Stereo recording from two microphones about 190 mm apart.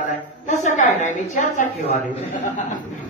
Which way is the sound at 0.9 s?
40° left (ahead or behind).